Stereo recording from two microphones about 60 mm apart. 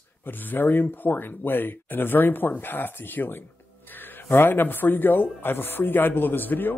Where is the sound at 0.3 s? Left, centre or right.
Left.